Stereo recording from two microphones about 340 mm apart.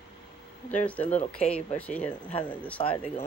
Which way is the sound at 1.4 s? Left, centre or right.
Centre.